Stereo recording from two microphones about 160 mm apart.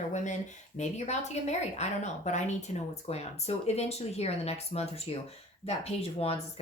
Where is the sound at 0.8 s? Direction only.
45° left (ahead or behind).